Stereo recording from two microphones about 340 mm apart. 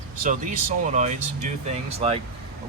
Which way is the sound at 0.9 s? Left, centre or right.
Right.